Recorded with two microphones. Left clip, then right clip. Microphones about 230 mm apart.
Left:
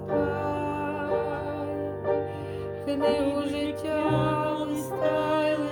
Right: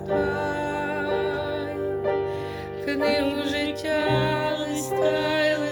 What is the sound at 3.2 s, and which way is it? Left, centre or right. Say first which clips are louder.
Music: right 2 dB; centre.